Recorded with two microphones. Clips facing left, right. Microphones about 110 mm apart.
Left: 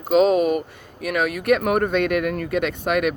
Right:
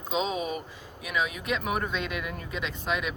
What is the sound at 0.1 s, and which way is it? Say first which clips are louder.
Speech: left 13 dB; 55° left (ahead or behind).